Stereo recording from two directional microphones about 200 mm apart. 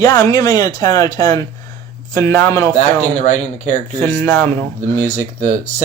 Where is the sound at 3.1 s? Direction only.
35° left (ahead or behind).